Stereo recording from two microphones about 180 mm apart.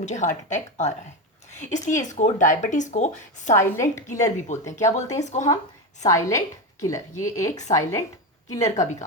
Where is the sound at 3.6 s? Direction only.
15° left (ahead or behind).